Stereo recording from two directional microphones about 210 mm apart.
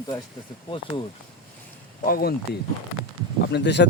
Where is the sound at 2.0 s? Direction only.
45° left (ahead or behind).